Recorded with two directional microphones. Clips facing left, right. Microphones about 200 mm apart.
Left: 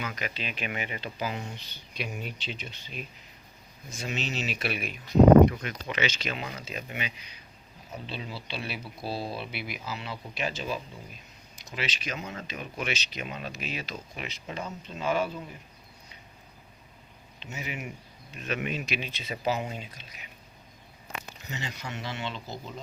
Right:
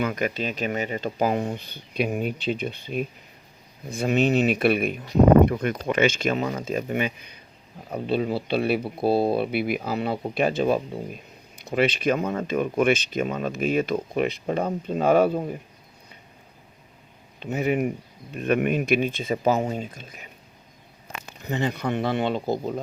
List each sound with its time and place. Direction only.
0.0 s speech: 50° right (ahead or behind)
17.4 s speech: 55° right (ahead or behind)
21.4 s speech: 55° right (ahead or behind)